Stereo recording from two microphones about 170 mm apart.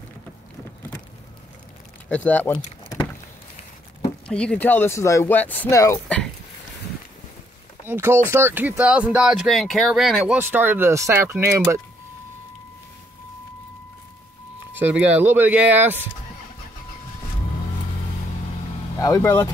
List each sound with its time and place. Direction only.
2.0 s speech: 10° left (ahead or behind)
4.3 s speech: 5° left (ahead or behind)
7.8 s speech: 15° right (ahead or behind)
14.8 s speech: 10° right (ahead or behind)
18.9 s speech: 15° left (ahead or behind)